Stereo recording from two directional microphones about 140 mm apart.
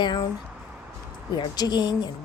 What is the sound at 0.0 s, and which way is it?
Speech, 30° left (ahead or behind).